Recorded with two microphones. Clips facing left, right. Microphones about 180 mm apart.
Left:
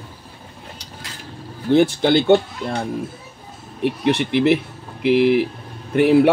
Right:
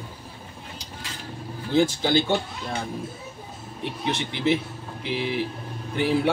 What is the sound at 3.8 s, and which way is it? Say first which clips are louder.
Speech: left 10 dB; 70° left (ahead or behind).